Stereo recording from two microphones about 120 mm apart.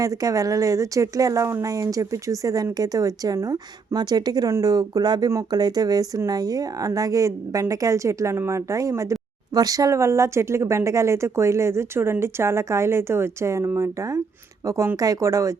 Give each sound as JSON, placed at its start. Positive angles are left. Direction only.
{"t": 0.0, "sound": "speech", "side_deg": -30}